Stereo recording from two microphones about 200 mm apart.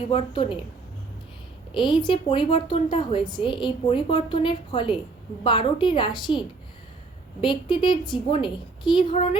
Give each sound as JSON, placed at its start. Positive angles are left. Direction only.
{"t": 0.1, "sound": "a woman's voice", "side_deg": 25}
{"t": 1.7, "sound": "a woman's voice", "side_deg": 25}
{"t": 7.4, "sound": "a woman's voice", "side_deg": 25}